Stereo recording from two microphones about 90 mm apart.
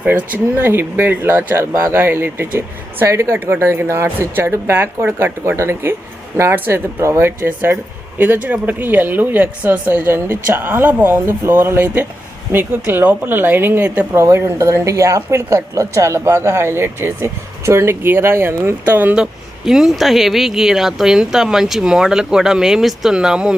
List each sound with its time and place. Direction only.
0.1 s speech: 20° right (ahead or behind)
14.1 s speech: 30° right (ahead or behind)
19.2 s speech: 5° right (ahead or behind)